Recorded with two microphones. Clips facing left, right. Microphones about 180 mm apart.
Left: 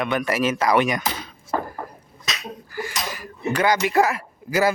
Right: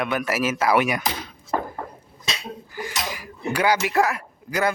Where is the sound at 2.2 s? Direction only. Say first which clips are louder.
Even; 30° right (ahead or behind).